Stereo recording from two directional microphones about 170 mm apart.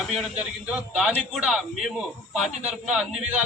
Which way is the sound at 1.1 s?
Centre (ahead or behind).